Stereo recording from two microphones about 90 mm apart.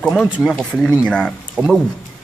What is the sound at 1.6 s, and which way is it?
Speech, 20° right (ahead or behind).